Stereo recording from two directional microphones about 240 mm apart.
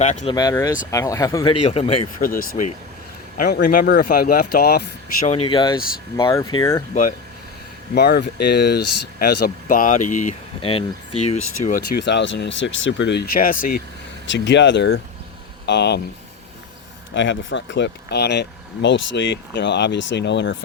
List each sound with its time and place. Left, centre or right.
0.0 s speech: left
0.3 s speech: centre
1.6 s speech: left
2.2 s speech: left
5.5 s speech: centre
7.9 s speech: left
11.9 s speech: left
14.3 s speech: left
17.2 s speech: left